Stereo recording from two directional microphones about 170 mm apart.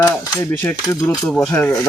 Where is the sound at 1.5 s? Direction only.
15° left (ahead or behind).